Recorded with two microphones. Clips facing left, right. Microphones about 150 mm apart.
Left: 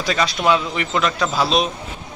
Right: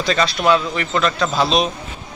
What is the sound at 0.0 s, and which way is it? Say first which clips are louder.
Speech: right 2 dB; 10° left (ahead or behind).